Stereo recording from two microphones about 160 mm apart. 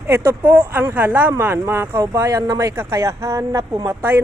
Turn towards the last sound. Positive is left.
turn(degrees=-15)  # may be behind; listen again after turning